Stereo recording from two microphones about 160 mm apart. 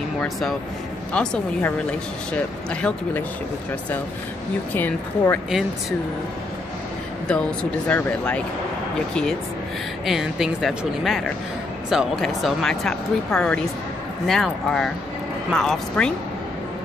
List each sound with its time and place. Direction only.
0.2 s a woman's voice: centre (ahead or behind)
4.7 s a woman's voice: 10° left (ahead or behind)
5.5 s speech: centre (ahead or behind)
7.9 s a woman's voice: 5° left (ahead or behind)
10.0 s speech: centre (ahead or behind)